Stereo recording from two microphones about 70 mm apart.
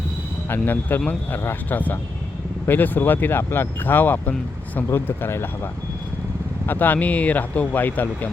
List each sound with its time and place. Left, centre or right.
0.4 s speech: left
6.7 s speech: left